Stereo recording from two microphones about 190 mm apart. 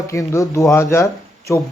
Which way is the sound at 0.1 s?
15° left (ahead or behind).